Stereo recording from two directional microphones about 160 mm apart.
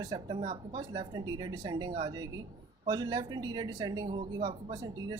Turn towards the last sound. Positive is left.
turn(degrees=-25)  # may be behind; listen again after turning